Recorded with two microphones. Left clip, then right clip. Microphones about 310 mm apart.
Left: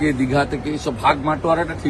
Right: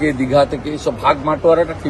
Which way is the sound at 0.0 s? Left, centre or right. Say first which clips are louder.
Right 5 dB; centre.